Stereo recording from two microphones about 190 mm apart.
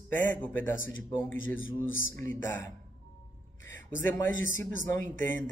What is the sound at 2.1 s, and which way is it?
Speech, 15° left (ahead or behind).